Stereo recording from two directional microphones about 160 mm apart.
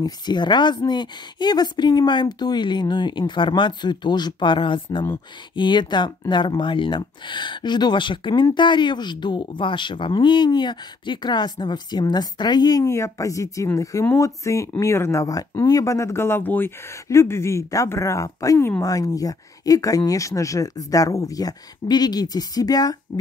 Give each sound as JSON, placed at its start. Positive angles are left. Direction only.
{"t": 0.0, "sound": "speech", "side_deg": 25}